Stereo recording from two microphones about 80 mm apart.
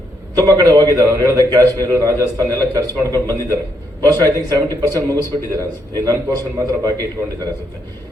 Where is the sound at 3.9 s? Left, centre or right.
Right.